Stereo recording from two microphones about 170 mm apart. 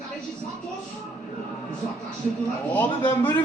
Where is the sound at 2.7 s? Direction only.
10° left (ahead or behind).